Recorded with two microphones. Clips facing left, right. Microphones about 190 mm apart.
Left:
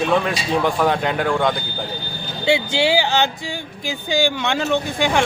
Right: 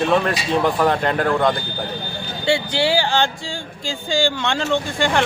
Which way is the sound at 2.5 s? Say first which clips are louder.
Left 1 dB; 20° left (ahead or behind).